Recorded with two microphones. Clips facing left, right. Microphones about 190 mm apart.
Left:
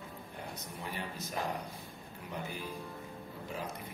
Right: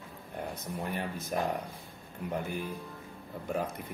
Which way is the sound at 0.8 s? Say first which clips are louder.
Right 5 dB; 55° right (ahead or behind).